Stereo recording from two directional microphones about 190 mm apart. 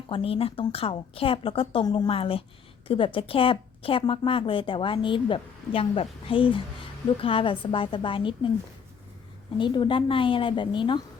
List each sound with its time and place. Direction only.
0.1 s speech: 30° left (ahead or behind)
9.6 s speech: 25° left (ahead or behind)